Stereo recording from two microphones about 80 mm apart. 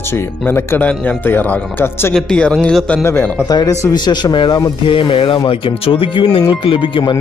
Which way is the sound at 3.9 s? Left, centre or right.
Left.